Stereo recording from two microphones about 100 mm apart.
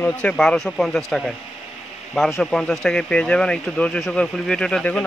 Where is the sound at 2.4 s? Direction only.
5° left (ahead or behind).